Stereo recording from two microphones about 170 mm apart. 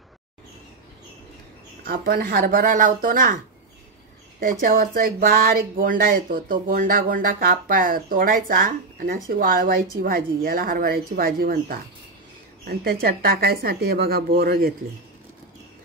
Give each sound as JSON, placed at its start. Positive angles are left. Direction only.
{"t": 1.8, "sound": "speech", "side_deg": -60}
{"t": 4.4, "sound": "speech", "side_deg": -55}